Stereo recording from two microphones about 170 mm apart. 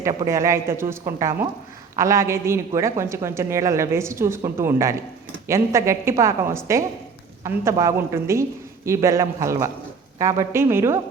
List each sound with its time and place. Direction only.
0.0 s speech: 15° right (ahead or behind)